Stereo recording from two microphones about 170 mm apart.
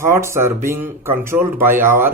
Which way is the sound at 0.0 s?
15° right (ahead or behind).